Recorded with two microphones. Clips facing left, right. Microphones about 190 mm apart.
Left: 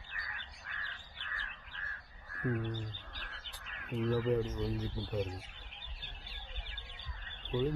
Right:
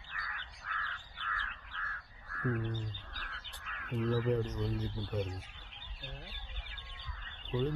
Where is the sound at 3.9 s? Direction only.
Centre (ahead or behind).